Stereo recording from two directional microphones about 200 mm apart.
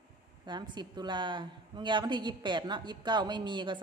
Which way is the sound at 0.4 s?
20° right (ahead or behind).